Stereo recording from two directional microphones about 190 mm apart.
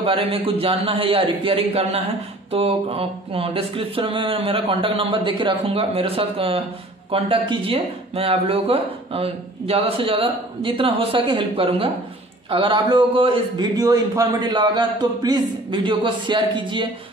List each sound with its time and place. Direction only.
0.0 s speech: 30° right (ahead or behind)